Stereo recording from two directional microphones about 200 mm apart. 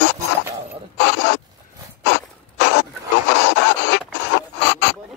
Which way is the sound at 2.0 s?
60° left (ahead or behind).